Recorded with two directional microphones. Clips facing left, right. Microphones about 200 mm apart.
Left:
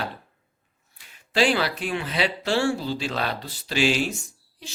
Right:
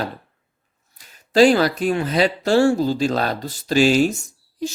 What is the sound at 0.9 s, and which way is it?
Speech, 40° right (ahead or behind).